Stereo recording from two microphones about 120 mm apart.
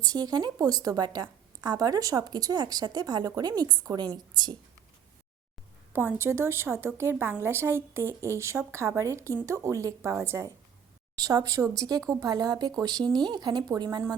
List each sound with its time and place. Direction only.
0.0 s a woman's voice: 35° right (ahead or behind)
5.9 s a woman's voice: 15° right (ahead or behind); by 14.0 s 35° right (ahead or behind)